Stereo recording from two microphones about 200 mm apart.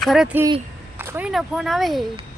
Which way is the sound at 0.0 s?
Centre (ahead or behind).